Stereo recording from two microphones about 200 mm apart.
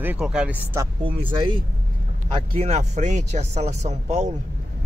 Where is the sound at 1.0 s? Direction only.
25° right (ahead or behind).